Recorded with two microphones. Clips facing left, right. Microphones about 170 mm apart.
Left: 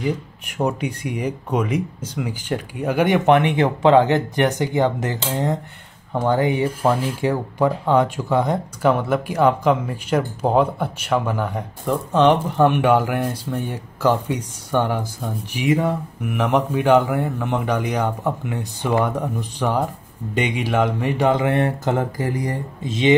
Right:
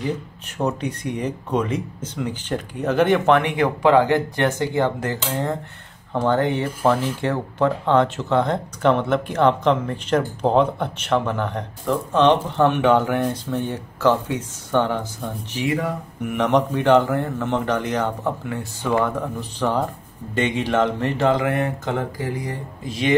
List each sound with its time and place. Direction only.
0.0 s speech: 10° left (ahead or behind)
16.2 s speech: 5° left (ahead or behind)
21.4 s mantra: 30° left (ahead or behind)
22.8 s speech: 20° left (ahead or behind)